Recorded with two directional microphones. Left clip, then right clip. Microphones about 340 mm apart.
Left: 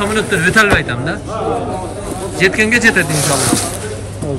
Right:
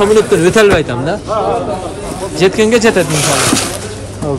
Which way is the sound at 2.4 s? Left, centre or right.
Centre.